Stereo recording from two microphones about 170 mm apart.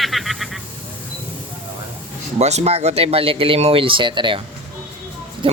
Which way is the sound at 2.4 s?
40° right (ahead or behind).